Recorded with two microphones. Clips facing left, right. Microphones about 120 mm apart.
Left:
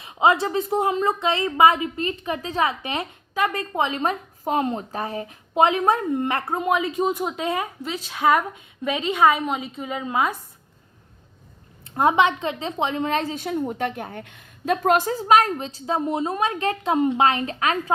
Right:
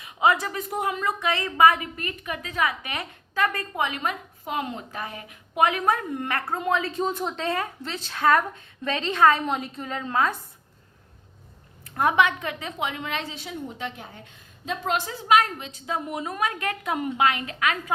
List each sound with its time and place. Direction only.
0.0 s a woman's voice: 25° left (ahead or behind)
11.9 s a woman's voice: 25° left (ahead or behind)